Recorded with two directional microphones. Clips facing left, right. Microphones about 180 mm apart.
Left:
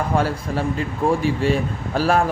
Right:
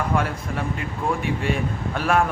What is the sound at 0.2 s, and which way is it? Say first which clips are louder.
Speech: left 4 dB; 30° left (ahead or behind).